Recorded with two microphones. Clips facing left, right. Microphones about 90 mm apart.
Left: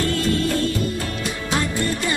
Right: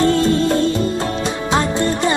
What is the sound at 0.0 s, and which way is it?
Music, 25° right (ahead or behind).